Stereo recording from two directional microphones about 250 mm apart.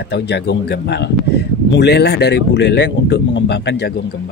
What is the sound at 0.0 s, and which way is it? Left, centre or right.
Speech, left.